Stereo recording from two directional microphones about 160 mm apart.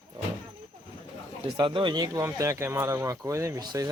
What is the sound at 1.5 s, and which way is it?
Speech, 30° right (ahead or behind).